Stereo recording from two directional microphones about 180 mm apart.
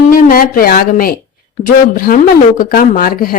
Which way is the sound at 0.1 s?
50° left (ahead or behind).